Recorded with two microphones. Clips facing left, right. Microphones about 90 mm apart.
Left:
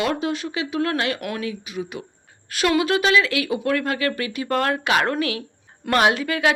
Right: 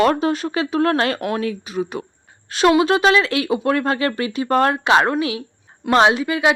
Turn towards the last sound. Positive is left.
turn(degrees=-20)  # may be behind; listen again after turning